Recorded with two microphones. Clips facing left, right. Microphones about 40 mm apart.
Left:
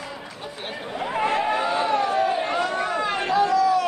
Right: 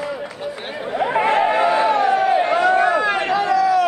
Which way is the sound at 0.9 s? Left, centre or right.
Right.